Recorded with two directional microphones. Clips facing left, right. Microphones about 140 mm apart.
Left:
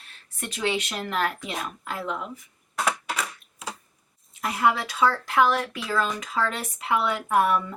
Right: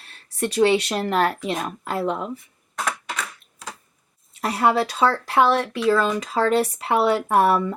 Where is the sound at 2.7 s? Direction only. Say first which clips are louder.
Left 1 dB; 5° left (ahead or behind).